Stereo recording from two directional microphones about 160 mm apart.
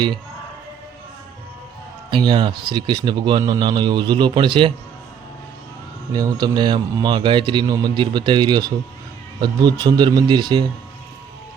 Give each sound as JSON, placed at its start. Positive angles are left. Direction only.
{"t": 2.0, "sound": "speech", "side_deg": -30}
{"t": 6.1, "sound": "speech", "side_deg": -25}